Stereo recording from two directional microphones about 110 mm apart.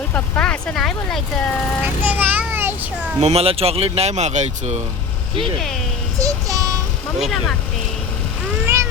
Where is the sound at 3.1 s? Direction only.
65° right (ahead or behind); by 4.8 s 90° right.